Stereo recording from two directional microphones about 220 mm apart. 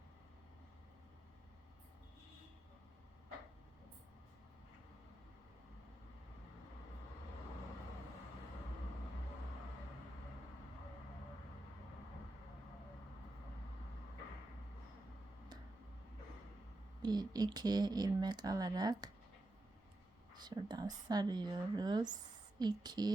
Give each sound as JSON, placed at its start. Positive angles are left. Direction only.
{"t": 17.0, "sound": "speech", "side_deg": -20}
{"t": 20.3, "sound": "speech", "side_deg": -20}